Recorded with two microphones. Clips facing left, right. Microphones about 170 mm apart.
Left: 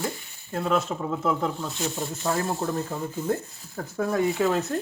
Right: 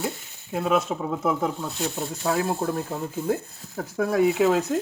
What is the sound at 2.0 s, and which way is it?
Rub, 5° right (ahead or behind).